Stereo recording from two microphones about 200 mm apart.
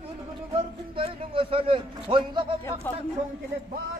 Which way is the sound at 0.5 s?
25° right (ahead or behind).